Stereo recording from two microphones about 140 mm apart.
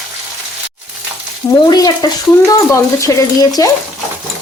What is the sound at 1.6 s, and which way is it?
Speech, 30° left (ahead or behind).